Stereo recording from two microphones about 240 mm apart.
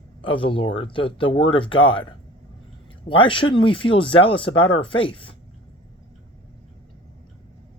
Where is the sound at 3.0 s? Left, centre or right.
Left.